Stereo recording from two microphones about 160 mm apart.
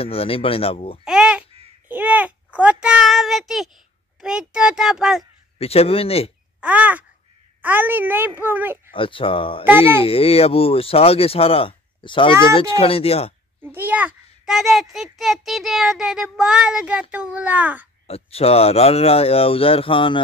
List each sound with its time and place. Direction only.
0.0 s speech: 35° left (ahead or behind)
1.0 s babbling: 5° right (ahead or behind)
1.9 s a sound: 10° right (ahead or behind)
4.2 s a child's voice: 5° right (ahead or behind)
5.6 s speech: 40° left (ahead or behind)
6.6 s a child's voice: 10° right (ahead or behind)
8.9 s speech: 35° left (ahead or behind)
13.6 s a child's voice: 10° right (ahead or behind)
18.0 s speech: 40° left (ahead or behind)